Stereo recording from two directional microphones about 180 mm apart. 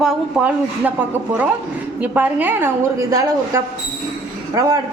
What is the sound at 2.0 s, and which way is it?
A woman's voice, 10° right (ahead or behind).